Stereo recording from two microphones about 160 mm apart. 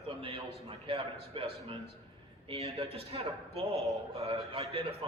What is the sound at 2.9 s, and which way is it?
A man's voice, 40° right (ahead or behind).